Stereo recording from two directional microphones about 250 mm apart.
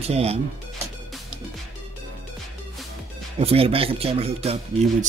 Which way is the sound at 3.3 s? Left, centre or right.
Right.